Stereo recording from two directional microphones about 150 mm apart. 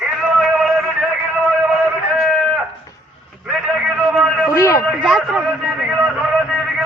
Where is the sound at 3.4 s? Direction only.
5° right (ahead or behind).